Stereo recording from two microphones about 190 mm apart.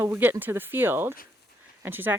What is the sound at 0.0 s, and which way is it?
Speech, 10° right (ahead or behind).